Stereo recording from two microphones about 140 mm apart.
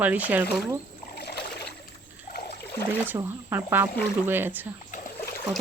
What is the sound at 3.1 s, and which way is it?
Speech, 20° right (ahead or behind).